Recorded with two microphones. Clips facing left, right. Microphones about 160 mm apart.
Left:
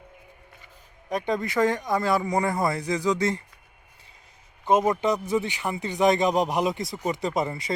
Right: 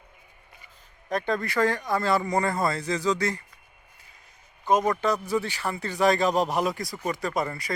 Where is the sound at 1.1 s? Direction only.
15° left (ahead or behind).